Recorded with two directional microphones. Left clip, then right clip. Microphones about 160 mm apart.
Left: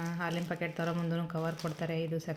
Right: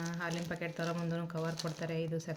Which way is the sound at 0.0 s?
45° left (ahead or behind).